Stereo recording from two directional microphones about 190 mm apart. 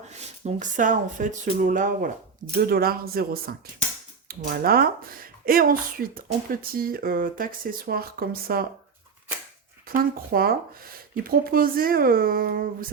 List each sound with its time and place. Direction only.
0.4 s speech: 40° right (ahead or behind)
9.9 s speech: 50° right (ahead or behind)